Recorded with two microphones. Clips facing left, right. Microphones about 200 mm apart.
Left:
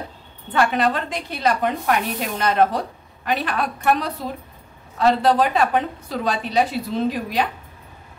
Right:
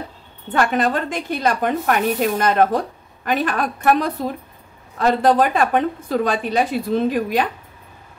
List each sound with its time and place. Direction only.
0.5 s a woman's voice: 45° right (ahead or behind)